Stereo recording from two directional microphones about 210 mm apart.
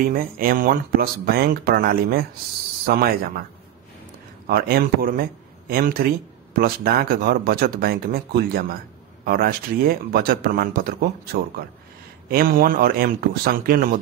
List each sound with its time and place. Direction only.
0.0 s speech: 45° right (ahead or behind)
4.5 s speech: 45° right (ahead or behind)